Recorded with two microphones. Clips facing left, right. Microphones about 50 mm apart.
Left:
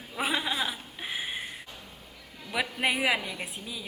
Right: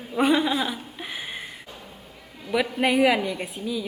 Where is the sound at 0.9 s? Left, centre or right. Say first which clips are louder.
Right 1 dB; centre.